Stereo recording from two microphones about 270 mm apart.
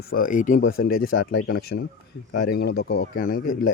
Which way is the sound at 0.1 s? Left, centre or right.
Left.